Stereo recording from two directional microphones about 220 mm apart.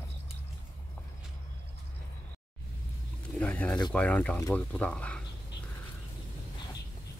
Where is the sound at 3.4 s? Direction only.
5° left (ahead or behind).